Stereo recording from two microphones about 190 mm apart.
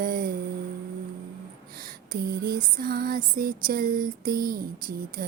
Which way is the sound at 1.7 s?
50° right (ahead or behind).